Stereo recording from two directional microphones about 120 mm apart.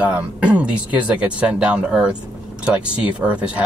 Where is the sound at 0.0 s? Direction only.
10° right (ahead or behind).